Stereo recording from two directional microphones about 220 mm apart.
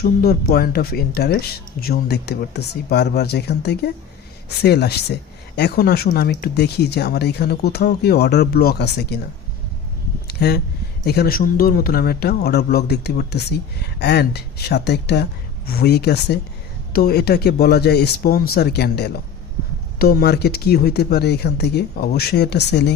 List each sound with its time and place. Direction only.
0.0 s a man's voice: 45° left (ahead or behind)
10.2 s a sound: 45° left (ahead or behind)
11.0 s a man's voice: 45° left (ahead or behind)